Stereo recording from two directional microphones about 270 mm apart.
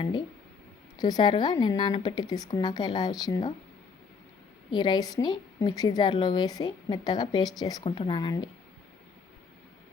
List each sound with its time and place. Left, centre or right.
0.9 s a woman's voice: centre
4.7 s a woman's voice: centre